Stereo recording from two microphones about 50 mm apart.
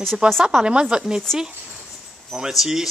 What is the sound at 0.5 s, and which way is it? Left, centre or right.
Speech, centre.